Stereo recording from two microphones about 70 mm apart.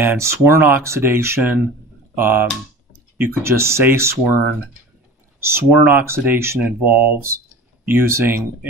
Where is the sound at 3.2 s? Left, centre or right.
Right.